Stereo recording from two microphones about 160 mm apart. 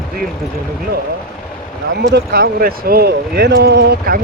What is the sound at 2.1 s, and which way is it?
Speech, 90° right.